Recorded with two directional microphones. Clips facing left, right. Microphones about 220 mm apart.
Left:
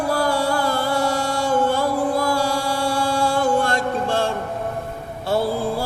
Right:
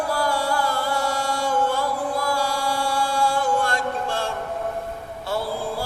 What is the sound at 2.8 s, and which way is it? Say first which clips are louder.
Mantra: left 3 dB; 25° left (ahead or behind).